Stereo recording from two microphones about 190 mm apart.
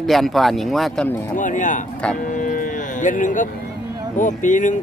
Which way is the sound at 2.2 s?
45° left (ahead or behind).